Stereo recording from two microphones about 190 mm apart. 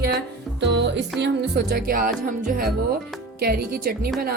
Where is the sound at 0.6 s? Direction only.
65° right (ahead or behind).